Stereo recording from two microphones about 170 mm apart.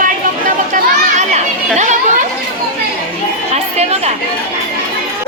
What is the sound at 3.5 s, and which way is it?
Chatter, 40° right (ahead or behind).